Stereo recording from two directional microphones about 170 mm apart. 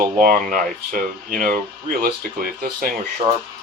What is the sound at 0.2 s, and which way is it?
Speech, 55° right (ahead or behind).